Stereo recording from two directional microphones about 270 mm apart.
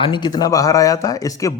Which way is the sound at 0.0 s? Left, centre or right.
Centre.